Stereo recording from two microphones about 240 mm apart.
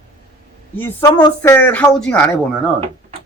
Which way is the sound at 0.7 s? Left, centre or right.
Centre.